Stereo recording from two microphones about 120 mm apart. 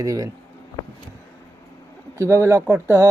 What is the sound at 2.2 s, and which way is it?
Speech, 20° right (ahead or behind).